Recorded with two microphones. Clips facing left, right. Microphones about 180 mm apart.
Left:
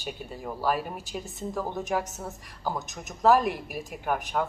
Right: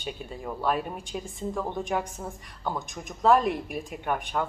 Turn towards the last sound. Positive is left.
turn(degrees=5)  # may be behind; listen again after turning